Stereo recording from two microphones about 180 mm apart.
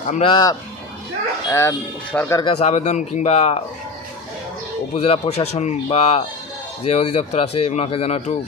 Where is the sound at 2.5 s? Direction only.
35° left (ahead or behind).